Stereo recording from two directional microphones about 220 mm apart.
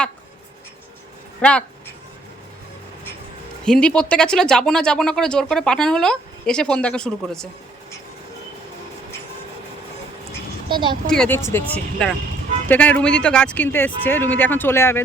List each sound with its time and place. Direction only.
1.4 s speech: 5° left (ahead or behind)
3.7 s speech: 5° left (ahead or behind)
10.7 s speech: 20° right (ahead or behind)
11.1 s speech: 5° left (ahead or behind)